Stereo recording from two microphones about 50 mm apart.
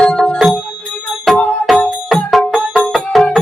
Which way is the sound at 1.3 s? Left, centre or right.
Centre.